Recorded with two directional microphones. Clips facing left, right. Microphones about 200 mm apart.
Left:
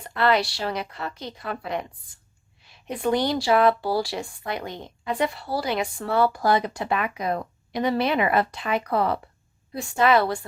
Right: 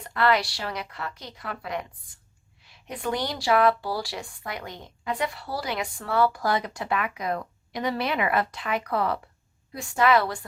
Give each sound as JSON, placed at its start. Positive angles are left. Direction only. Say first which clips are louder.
{"t": 0.2, "sound": "speech", "louder": "left 2 dB", "side_deg": 25}